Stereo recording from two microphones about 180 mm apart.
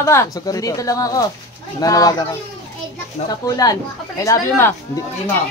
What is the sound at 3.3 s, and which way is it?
A man's voice, 20° left (ahead or behind).